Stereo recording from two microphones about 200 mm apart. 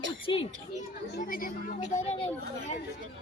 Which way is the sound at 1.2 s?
40° left (ahead or behind).